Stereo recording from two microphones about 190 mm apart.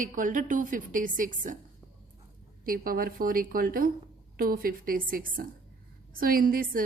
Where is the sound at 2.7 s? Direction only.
50° right (ahead or behind).